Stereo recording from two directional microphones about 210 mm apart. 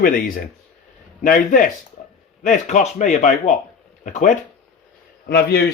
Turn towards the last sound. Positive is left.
turn(degrees=50)  # may be behind; listen again after turning